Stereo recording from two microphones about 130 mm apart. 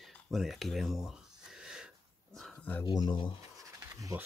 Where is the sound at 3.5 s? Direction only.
25° right (ahead or behind).